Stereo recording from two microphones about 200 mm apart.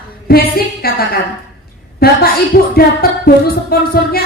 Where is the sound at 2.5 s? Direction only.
50° left (ahead or behind).